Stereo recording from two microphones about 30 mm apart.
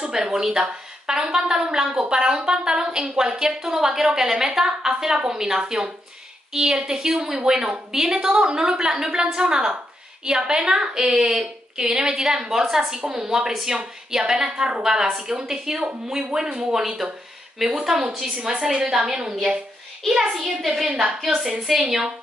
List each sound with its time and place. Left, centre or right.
0.1 s a woman's voice: centre
11.7 s a woman's voice: right
16.3 s speech: right
16.7 s a woman's voice: centre